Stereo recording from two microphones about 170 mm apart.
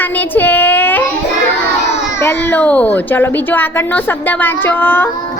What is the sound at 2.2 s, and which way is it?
A child's voice, 10° left (ahead or behind).